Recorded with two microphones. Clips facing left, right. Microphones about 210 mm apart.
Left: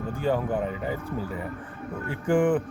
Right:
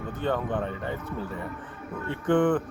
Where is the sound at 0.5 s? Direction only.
5° left (ahead or behind).